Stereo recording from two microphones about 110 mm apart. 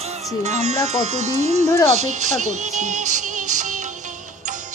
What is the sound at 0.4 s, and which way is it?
Speech, 90° right.